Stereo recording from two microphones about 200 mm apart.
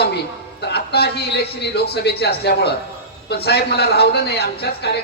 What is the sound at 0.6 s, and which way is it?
A man's voice, 55° left (ahead or behind).